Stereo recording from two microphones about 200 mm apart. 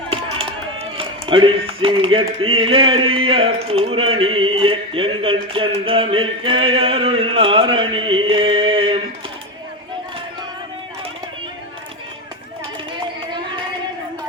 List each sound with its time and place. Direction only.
0.1 s a man's voice: 25° right (ahead or behind)